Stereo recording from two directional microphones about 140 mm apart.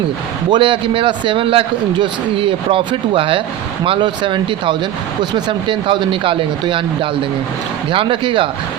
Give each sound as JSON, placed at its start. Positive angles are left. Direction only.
{"t": 0.5, "sound": "a man's voice", "side_deg": -35}